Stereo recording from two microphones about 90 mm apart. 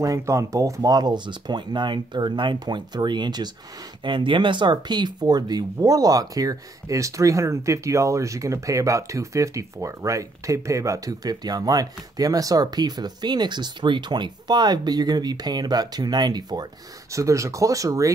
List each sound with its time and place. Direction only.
0.0 s speech: 35° right (ahead or behind)
4.0 s speech: 65° right (ahead or behind); by 16.6 s 50° right (ahead or behind)
17.1 s speech: 35° right (ahead or behind)